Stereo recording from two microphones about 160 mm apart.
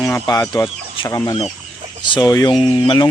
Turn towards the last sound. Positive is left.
turn(degrees=25)  # may be behind; listen again after turning